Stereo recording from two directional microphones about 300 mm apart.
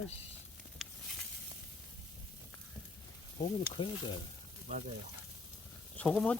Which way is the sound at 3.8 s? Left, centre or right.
Centre.